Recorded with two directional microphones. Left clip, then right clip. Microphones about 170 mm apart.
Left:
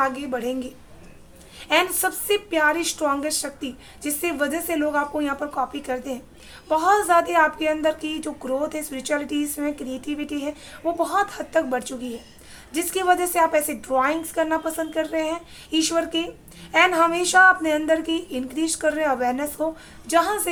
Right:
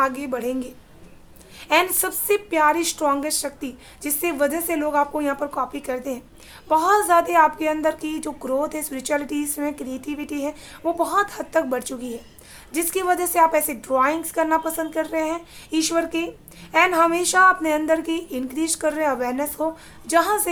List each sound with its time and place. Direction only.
0.0 s speech: 20° right (ahead or behind)